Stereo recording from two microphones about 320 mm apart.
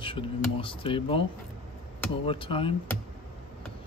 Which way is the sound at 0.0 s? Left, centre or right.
Centre.